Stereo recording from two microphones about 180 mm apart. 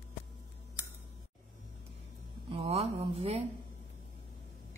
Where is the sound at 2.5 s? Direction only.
30° right (ahead or behind).